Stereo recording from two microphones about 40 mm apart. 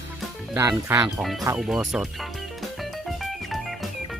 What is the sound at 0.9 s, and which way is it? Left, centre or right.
Speech, right.